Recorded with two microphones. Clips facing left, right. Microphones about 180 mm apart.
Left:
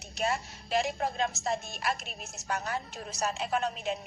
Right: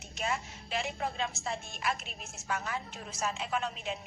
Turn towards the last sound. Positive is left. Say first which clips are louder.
# left 4 dB
turn(degrees=40)  # may be behind; listen again after turning